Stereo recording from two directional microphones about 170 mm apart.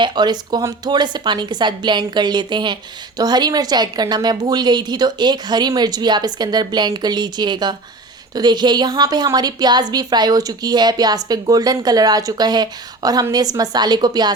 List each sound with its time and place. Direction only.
0.0 s a woman's voice: 25° right (ahead or behind)